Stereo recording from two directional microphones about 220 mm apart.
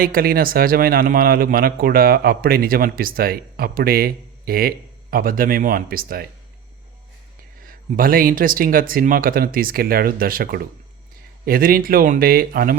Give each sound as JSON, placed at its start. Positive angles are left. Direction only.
{"t": 0.0, "sound": "a man's voice", "side_deg": -40}
{"t": 7.6, "sound": "a man's voice", "side_deg": -40}